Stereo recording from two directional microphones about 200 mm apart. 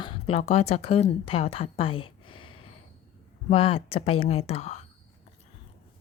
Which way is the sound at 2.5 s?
90° left.